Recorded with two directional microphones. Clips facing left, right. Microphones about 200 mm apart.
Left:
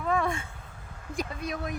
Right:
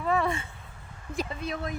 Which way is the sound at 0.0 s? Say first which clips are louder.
Right 1 dB; 5° right (ahead or behind).